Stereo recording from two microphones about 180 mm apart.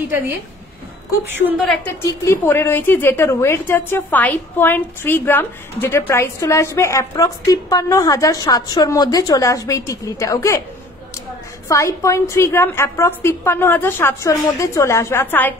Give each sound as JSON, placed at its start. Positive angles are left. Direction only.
{"t": 1.6, "sound": "a woman's voice", "side_deg": 5}
{"t": 11.7, "sound": "a woman's voice", "side_deg": 15}